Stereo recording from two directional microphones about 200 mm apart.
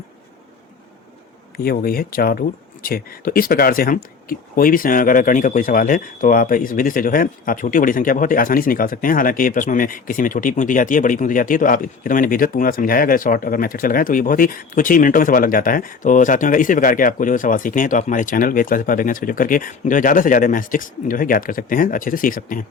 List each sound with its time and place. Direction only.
1.5 s speech: 50° left (ahead or behind)